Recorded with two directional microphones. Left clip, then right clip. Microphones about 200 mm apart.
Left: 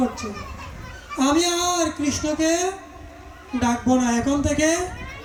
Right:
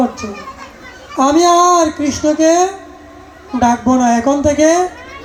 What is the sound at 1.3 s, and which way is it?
Speech, 5° left (ahead or behind).